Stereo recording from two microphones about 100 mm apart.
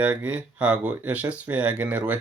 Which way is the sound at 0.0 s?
15° right (ahead or behind).